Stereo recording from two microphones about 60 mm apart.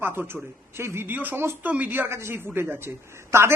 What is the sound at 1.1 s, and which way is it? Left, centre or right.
A man's voice, right.